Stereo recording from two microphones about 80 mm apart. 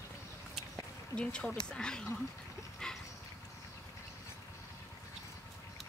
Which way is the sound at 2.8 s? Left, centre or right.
Centre.